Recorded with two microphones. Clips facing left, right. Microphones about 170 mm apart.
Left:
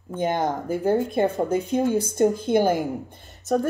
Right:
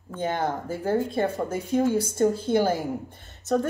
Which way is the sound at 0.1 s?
15° left (ahead or behind).